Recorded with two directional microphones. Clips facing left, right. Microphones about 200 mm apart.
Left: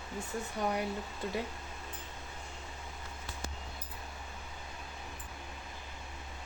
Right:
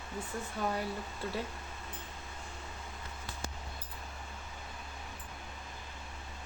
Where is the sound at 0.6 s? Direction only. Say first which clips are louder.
Left 1 dB; 15° left (ahead or behind).